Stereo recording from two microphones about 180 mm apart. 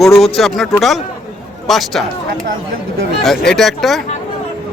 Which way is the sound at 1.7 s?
Centre (ahead or behind).